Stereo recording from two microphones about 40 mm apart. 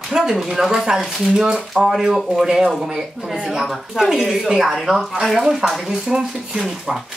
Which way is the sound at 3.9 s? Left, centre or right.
Centre.